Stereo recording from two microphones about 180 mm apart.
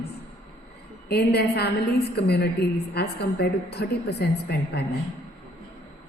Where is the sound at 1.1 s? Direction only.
65° left (ahead or behind).